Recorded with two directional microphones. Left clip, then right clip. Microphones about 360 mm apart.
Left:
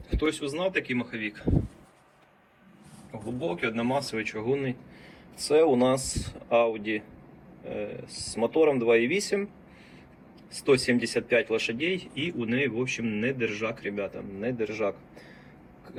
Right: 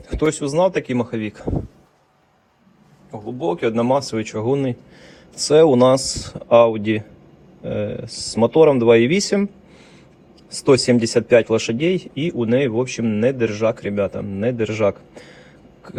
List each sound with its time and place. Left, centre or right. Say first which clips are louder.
0.2 s speech: right 11 dB; centre
3.1 s speech: right 9 dB; centre
7.6 s speech: right 10 dB; right
8.0 s speech: right 10 dB; right
10.5 s speech: right 9 dB; centre